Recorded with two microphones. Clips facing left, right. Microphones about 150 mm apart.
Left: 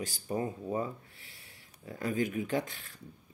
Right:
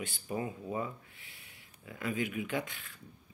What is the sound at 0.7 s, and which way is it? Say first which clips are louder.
Rub: left 3 dB; 40° left (ahead or behind).